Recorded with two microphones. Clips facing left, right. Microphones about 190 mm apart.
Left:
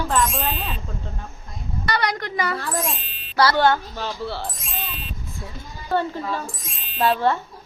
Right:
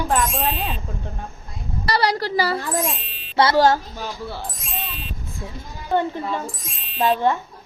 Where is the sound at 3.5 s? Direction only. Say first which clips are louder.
Right 4 dB; 35° right (ahead or behind).